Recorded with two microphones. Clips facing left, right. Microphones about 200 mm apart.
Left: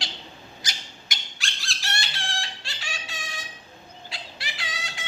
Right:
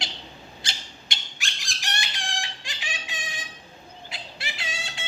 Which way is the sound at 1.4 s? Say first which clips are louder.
Left 1 dB; 15° right (ahead or behind).